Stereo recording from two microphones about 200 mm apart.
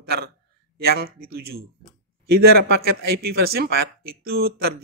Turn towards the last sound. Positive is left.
turn(degrees=-50)  # may be behind; listen again after turning